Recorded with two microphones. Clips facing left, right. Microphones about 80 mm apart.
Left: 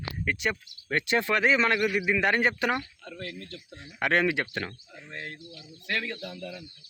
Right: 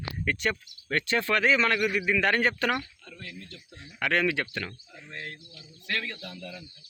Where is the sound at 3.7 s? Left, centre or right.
Left; by 6.6 s centre.